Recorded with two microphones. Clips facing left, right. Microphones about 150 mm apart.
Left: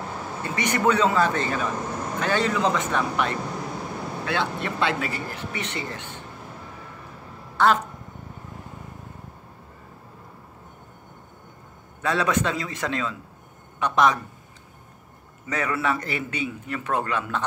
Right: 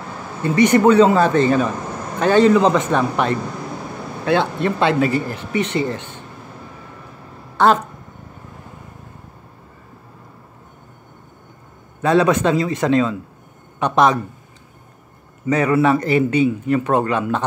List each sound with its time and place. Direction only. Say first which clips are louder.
0.6 s a man's voice: right 10 dB; 30° right (ahead or behind)
7.5 s speech: right 5 dB; 25° right (ahead or behind)
12.0 s a man's voice: right 8 dB; 25° right (ahead or behind)
15.4 s a man's voice: right 10 dB; 25° right (ahead or behind)